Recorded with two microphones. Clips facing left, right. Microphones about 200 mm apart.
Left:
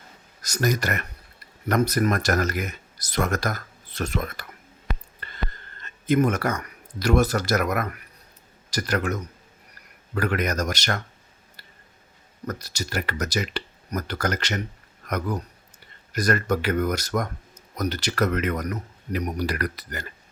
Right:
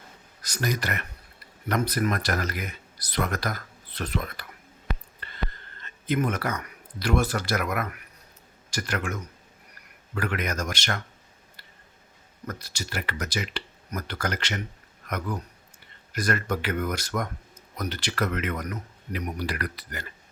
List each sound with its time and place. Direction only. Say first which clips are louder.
0.4 s speech: left 5 dB; 45° left (ahead or behind)
5.2 s a sound: left 2 dB; 45° left (ahead or behind)
6.1 s speech: left 5 dB; 45° left (ahead or behind)
12.5 s speech: left 4 dB; 40° left (ahead or behind)